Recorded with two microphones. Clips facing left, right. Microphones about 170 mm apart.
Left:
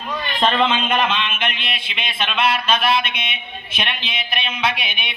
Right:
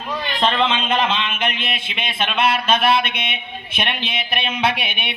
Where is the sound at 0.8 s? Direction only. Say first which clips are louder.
Even; 30° right (ahead or behind).